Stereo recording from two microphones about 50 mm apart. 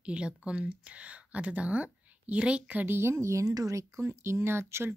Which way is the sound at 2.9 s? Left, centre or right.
Right.